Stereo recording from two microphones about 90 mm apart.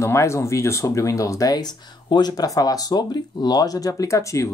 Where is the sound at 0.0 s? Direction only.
30° left (ahead or behind).